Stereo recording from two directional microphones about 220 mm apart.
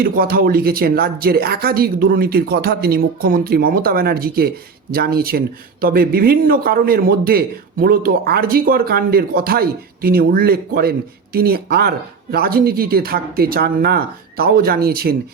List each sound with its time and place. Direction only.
0.0 s speech: 40° right (ahead or behind)